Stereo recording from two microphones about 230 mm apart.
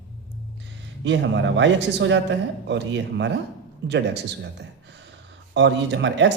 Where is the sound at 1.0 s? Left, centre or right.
Right.